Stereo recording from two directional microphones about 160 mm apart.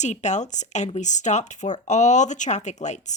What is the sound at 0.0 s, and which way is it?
A woman's voice, 45° left (ahead or behind).